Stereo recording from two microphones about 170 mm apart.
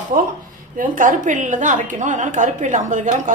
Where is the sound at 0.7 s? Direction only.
50° right (ahead or behind).